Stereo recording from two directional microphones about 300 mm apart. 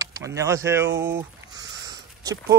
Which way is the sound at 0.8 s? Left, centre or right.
Right.